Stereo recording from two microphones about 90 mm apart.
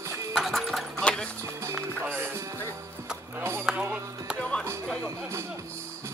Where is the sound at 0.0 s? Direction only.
35° right (ahead or behind).